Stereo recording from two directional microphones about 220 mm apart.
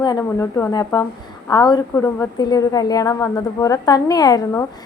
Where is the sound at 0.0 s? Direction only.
15° left (ahead or behind).